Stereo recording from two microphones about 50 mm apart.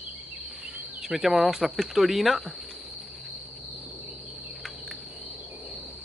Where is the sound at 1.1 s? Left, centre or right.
Centre.